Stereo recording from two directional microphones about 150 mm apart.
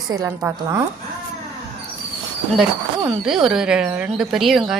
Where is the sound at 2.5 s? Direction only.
Centre (ahead or behind).